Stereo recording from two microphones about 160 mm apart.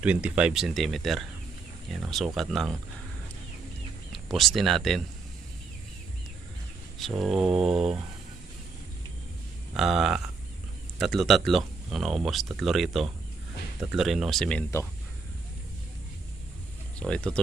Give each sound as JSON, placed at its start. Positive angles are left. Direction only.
{"t": 0.0, "sound": "speech", "side_deg": -10}
{"t": 4.1, "sound": "speech", "side_deg": 0}
{"t": 7.0, "sound": "speech", "side_deg": 0}
{"t": 7.7, "sound": "speech", "side_deg": -40}
{"t": 9.7, "sound": "speech", "side_deg": 0}
{"t": 17.0, "sound": "speech", "side_deg": 5}